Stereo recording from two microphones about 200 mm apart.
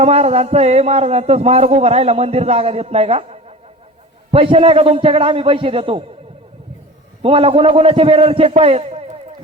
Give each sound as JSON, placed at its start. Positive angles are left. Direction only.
{"t": 0.0, "sound": "a man's voice", "side_deg": -30}
{"t": 7.2, "sound": "a man's voice", "side_deg": -30}